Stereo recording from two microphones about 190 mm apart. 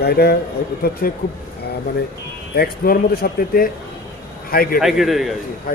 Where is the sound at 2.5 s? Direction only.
50° left (ahead or behind).